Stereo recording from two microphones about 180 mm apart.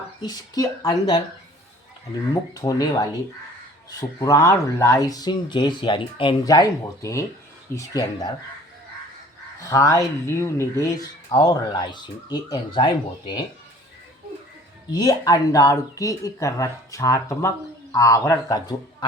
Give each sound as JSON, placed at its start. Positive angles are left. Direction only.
{"t": 0.2, "sound": "speech", "side_deg": 20}
{"t": 2.5, "sound": "speech", "side_deg": 20}
{"t": 4.2, "sound": "speech", "side_deg": 15}
{"t": 9.6, "sound": "speech", "side_deg": 20}
{"t": 14.8, "sound": "speech", "side_deg": 20}